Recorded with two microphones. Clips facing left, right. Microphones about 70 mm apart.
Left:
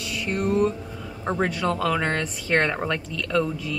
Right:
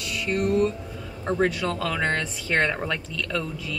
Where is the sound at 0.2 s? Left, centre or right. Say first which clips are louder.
Even; left.